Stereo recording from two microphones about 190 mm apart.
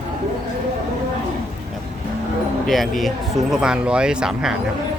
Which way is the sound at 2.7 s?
Centre (ahead or behind).